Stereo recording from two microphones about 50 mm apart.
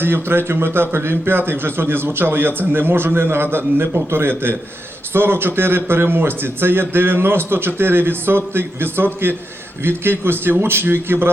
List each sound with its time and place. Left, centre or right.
0.0 s a man's voice: right